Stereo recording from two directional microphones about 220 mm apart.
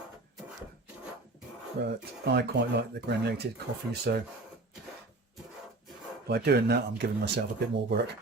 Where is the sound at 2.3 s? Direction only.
50° right (ahead or behind).